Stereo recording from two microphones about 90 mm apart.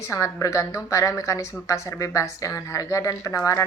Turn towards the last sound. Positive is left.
turn(degrees=35)  # may be behind; listen again after turning